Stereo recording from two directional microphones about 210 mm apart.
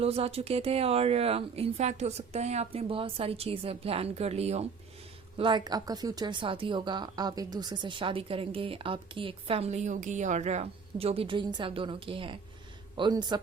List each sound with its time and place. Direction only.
0.0 s a woman's voice: 30° right (ahead or behind)